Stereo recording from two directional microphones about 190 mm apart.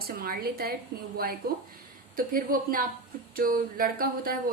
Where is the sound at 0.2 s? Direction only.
50° right (ahead or behind).